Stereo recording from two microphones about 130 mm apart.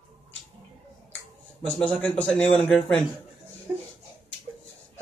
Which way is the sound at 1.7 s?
10° left (ahead or behind).